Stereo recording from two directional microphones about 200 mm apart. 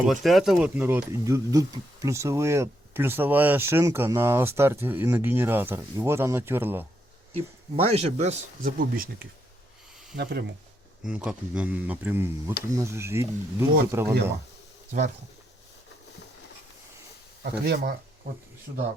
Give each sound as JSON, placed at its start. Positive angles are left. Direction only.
{"t": 0.0, "sound": "speech", "side_deg": 0}
{"t": 7.3, "sound": "speech", "side_deg": -30}
{"t": 10.2, "sound": "speech", "side_deg": -55}
{"t": 11.0, "sound": "speech", "side_deg": -5}